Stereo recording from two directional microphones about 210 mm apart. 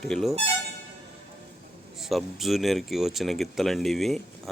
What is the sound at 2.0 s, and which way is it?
Speech, centre (ahead or behind).